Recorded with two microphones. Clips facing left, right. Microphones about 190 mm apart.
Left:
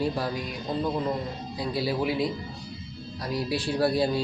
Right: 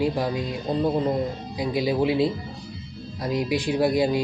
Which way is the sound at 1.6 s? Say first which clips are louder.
Right 5 dB; 15° right (ahead or behind).